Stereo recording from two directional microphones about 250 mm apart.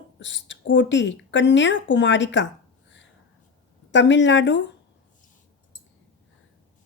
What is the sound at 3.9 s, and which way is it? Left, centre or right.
Speech, left.